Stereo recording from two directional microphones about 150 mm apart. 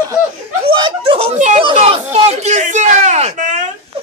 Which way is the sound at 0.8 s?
35° right (ahead or behind).